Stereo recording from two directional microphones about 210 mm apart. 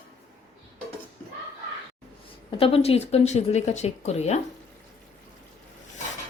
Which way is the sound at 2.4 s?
25° left (ahead or behind).